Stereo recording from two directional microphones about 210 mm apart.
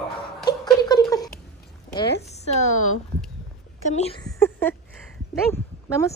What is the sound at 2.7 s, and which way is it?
Speech, 85° left.